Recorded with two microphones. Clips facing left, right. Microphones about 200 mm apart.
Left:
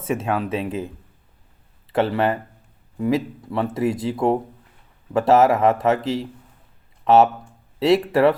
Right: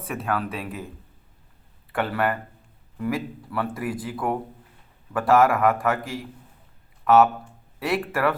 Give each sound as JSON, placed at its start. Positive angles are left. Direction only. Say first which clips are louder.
{"t": 0.1, "sound": "speech", "louder": "left 5 dB", "side_deg": 25}
{"t": 1.9, "sound": "speech", "louder": "left 5 dB", "side_deg": 25}